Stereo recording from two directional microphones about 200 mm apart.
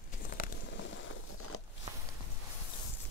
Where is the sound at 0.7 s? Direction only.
65° left (ahead or behind); by 1.6 s 80° left.